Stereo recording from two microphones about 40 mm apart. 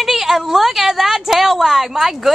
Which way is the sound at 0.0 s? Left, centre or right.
Centre.